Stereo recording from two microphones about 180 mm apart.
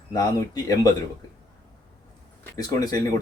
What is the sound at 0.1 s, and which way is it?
Speech, 20° left (ahead or behind).